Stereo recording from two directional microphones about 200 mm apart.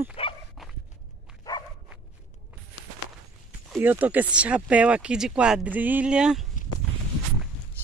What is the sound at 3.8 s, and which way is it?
Speech, 10° right (ahead or behind).